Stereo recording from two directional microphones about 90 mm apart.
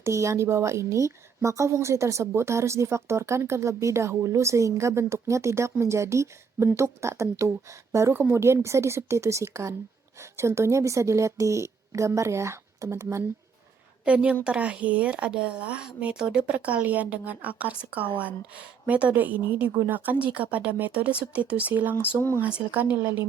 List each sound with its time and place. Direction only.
0.0 s a woman's voice: 35° right (ahead or behind)
14.0 s speech: 15° right (ahead or behind)